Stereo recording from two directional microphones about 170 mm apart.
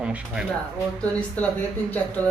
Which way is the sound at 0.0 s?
5° right (ahead or behind).